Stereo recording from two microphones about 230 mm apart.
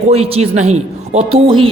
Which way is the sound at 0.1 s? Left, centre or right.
Right.